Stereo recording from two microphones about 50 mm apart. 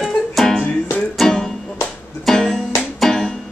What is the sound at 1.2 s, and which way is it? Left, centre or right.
Music, centre.